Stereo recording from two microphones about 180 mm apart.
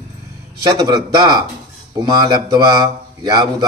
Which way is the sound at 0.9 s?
25° right (ahead or behind).